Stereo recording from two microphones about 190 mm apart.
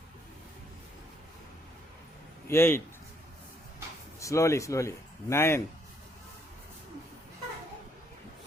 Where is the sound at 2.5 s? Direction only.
15° left (ahead or behind).